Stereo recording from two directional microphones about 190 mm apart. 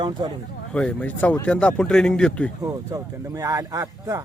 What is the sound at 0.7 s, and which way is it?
Speech, 5° left (ahead or behind).